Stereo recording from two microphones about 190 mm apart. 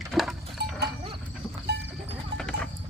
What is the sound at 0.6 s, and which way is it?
Livestock, 60° right (ahead or behind).